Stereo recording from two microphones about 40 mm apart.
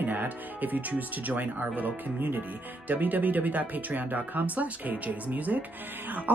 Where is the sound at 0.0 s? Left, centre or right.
Right.